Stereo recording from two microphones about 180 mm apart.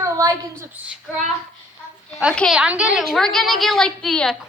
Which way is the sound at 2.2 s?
Centre (ahead or behind).